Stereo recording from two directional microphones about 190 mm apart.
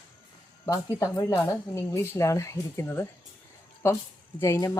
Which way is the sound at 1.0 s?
15° left (ahead or behind).